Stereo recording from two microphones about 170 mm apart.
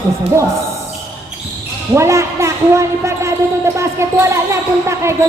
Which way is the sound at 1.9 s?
15° right (ahead or behind).